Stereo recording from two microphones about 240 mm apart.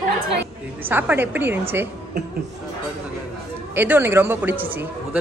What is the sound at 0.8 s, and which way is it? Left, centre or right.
Speech, centre.